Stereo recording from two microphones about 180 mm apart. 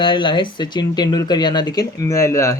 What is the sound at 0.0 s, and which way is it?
Speech, 25° left (ahead or behind).